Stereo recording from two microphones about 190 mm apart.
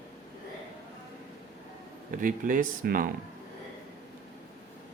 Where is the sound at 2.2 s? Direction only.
45° right (ahead or behind).